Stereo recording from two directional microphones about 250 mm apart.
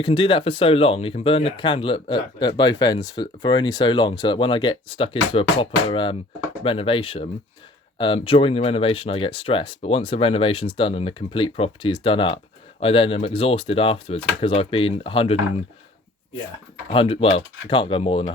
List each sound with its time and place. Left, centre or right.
0.0 s speech: centre
16.9 s speech: left